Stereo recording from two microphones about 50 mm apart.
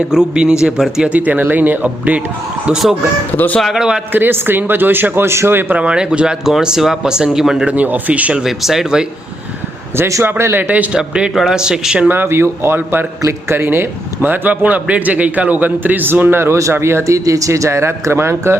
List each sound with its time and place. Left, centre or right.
0.1 s speech: centre
1.0 s a man's voice: right
3.8 s speech: centre
4.1 s speech: right
5.8 s speech: centre
7.6 s speech: right
8.4 s speech: centre
10.2 s speech: right
10.6 s a man's voice: right
10.9 s speech: centre
12.0 s a man's voice: right
16.4 s speech: right
16.7 s speech: right